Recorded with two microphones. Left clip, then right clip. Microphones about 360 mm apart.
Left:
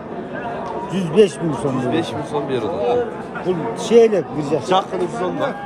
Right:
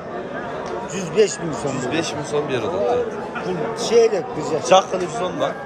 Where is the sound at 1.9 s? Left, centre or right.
Centre.